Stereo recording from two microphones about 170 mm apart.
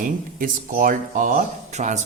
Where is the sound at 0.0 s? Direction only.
55° right (ahead or behind).